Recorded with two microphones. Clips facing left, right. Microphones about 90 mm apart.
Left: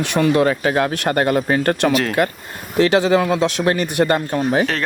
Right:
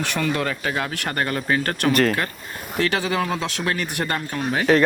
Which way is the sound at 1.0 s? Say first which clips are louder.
Left 5 dB; 25° left (ahead or behind).